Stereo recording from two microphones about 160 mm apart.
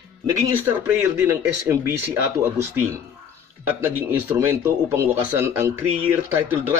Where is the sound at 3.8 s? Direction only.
15° right (ahead or behind).